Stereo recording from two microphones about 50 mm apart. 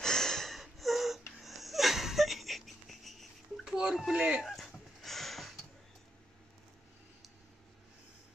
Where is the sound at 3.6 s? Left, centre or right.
Centre.